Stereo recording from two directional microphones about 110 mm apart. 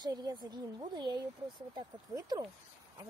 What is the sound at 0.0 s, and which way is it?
Speech, 40° right (ahead or behind).